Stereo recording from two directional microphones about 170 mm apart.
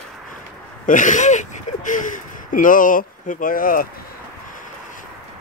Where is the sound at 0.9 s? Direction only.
50° left (ahead or behind).